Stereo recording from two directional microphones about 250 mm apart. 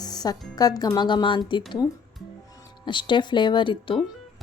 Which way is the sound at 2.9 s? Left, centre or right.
Centre.